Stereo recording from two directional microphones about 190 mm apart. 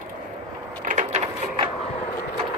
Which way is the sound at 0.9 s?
40° right (ahead or behind).